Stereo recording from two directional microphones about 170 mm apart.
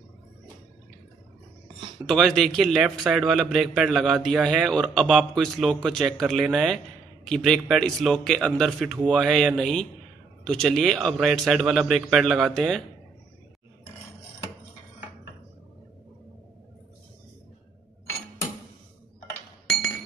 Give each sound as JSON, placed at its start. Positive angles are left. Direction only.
{"t": 2.0, "sound": "a man's voice", "side_deg": 0}